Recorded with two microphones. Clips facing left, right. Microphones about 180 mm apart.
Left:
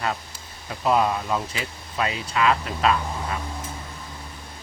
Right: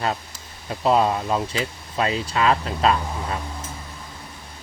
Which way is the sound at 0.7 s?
30° right (ahead or behind).